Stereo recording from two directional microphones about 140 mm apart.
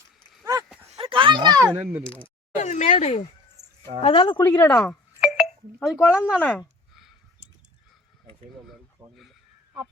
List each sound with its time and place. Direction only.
0.9 s a sound: 40° right (ahead or behind)
1.6 s speech: 15° right (ahead or behind)
2.6 s speech: 55° left (ahead or behind)
4.0 s speech: 40° left (ahead or behind)
4.4 s speech: 20° left (ahead or behind)
4.9 s a sound: centre (ahead or behind)
5.9 s speech: 15° left (ahead or behind)